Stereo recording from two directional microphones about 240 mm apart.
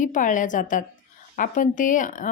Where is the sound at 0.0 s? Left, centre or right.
Left.